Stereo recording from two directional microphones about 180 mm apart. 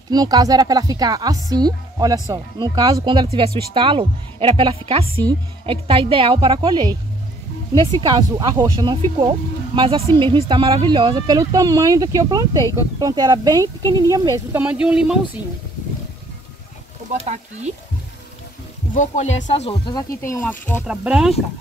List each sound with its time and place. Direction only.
0.1 s speech: 20° right (ahead or behind); by 15.4 s 5° right (ahead or behind)
17.1 s speech: 40° right (ahead or behind)
18.9 s speech: 40° left (ahead or behind)
19.9 s speech: 20° left (ahead or behind)
20.8 s speech: 5° right (ahead or behind)